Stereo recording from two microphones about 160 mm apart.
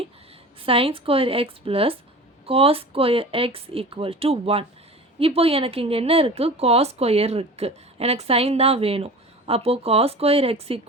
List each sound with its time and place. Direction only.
0.6 s a woman's voice: 35° right (ahead or behind)